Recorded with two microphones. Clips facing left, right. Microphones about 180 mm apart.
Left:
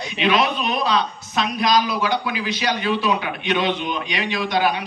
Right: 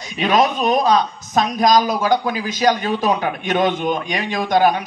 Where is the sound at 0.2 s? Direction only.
45° right (ahead or behind).